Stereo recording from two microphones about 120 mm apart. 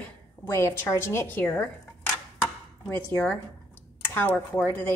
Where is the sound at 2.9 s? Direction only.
15° left (ahead or behind).